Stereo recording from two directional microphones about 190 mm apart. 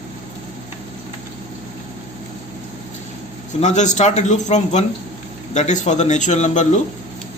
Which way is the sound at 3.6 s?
40° left (ahead or behind).